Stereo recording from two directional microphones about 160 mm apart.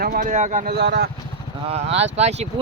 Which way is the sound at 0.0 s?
70° right (ahead or behind).